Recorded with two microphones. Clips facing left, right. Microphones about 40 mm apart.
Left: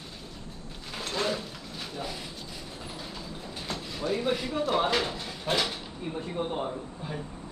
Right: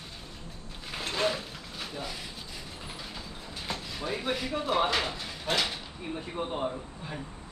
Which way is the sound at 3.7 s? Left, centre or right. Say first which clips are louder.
Left 3 dB; centre.